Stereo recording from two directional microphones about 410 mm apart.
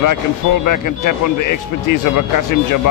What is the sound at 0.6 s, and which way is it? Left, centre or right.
Speech, left.